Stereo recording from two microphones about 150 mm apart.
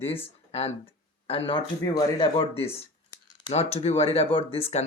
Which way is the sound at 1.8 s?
25° left (ahead or behind).